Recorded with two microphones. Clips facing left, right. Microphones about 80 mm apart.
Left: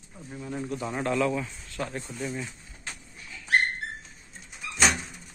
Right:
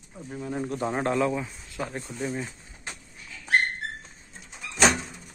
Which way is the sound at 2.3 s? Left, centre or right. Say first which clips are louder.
Right 2 dB; right.